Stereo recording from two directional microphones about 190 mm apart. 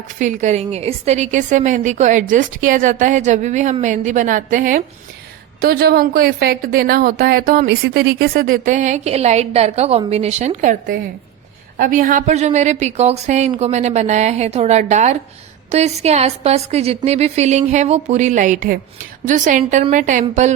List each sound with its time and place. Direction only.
0.2 s a woman's voice: 40° right (ahead or behind)
5.5 s a woman's voice: 55° right (ahead or behind); by 20.6 s 40° right (ahead or behind)